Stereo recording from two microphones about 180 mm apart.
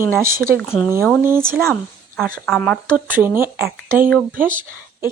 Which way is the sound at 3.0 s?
10° right (ahead or behind).